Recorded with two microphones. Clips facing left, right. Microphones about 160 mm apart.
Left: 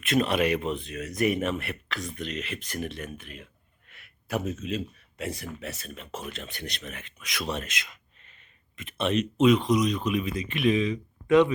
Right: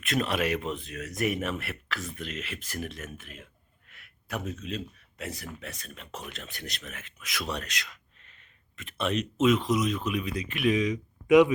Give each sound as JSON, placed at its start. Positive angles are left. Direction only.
{"t": 0.0, "sound": "speech", "side_deg": 0}
{"t": 7.7, "sound": "speech", "side_deg": 20}
{"t": 8.8, "sound": "speech", "side_deg": 0}